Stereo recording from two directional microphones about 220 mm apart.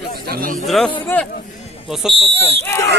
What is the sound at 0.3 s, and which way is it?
Speech, 40° right (ahead or behind).